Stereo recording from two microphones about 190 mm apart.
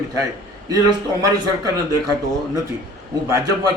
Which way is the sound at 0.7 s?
20° right (ahead or behind).